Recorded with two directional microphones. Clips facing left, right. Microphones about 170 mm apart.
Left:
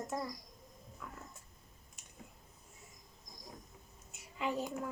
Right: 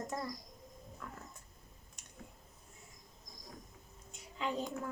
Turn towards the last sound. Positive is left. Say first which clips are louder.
# left 1 dB
turn(degrees=5)  # may be behind; listen again after turning